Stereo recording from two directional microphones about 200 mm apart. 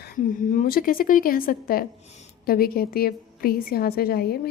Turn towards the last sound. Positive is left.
turn(degrees=50)  # may be behind; listen again after turning